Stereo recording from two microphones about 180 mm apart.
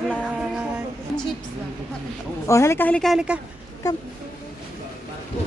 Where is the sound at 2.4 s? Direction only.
15° left (ahead or behind); by 3.3 s centre (ahead or behind).